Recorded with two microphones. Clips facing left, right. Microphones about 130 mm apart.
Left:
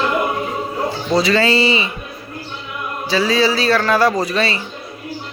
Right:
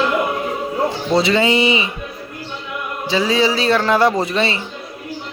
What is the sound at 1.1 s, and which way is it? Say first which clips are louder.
Speech: even; 20° right (ahead or behind).